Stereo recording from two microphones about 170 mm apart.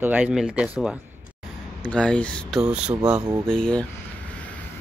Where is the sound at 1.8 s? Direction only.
5° left (ahead or behind).